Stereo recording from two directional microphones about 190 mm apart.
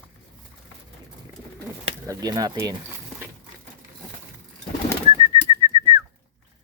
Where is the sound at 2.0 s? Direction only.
20° right (ahead or behind).